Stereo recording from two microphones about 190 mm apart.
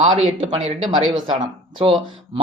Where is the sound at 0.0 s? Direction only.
30° right (ahead or behind).